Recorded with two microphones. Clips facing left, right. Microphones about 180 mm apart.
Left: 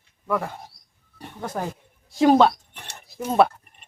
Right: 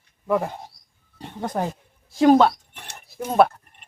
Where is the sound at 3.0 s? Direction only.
Centre (ahead or behind).